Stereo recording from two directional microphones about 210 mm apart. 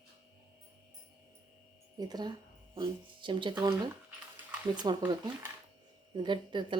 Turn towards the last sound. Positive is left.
turn(degrees=-20)  # may be behind; listen again after turning